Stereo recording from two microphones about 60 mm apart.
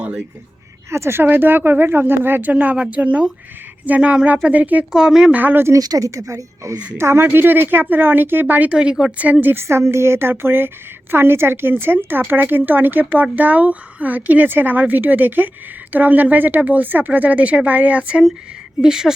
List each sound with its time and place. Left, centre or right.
0.9 s speech: right
4.9 s a woman's voice: centre
5.3 s speech: right
5.7 s a woman's voice: right
6.9 s speech: right
8.7 s a woman's voice: centre
9.1 s speech: right
9.6 s speech: right
18.8 s a woman's voice: centre